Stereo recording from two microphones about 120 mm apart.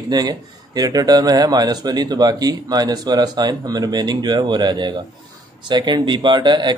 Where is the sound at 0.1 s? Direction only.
35° right (ahead or behind).